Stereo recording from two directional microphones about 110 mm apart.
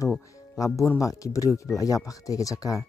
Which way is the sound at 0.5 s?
30° left (ahead or behind).